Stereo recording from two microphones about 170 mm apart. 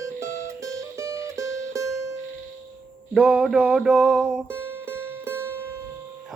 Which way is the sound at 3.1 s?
5° right (ahead or behind).